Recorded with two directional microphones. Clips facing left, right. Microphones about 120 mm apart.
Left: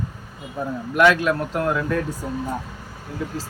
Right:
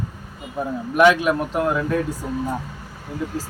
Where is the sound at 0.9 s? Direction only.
15° right (ahead or behind).